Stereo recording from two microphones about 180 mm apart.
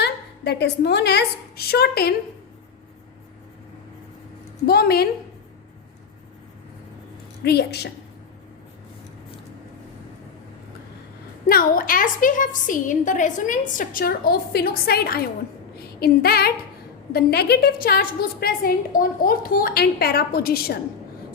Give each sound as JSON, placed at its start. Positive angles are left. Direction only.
{"t": 0.0, "sound": "a woman's voice", "side_deg": 70}
{"t": 4.6, "sound": "a woman's voice", "side_deg": 60}
{"t": 7.4, "sound": "a woman's voice", "side_deg": 65}
{"t": 11.4, "sound": "a woman's voice", "side_deg": 50}
{"t": 15.7, "sound": "a sound", "side_deg": 60}
{"t": 17.1, "sound": "a woman's voice", "side_deg": 60}